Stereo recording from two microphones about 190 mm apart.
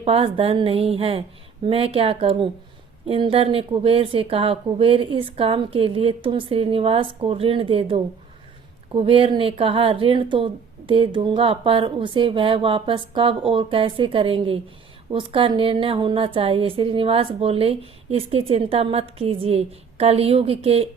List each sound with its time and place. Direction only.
0.0 s a woman's voice: 30° right (ahead or behind)